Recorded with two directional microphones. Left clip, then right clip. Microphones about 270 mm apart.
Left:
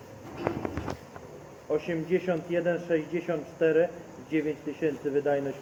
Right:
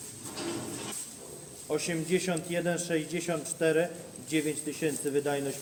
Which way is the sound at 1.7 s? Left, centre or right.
Right.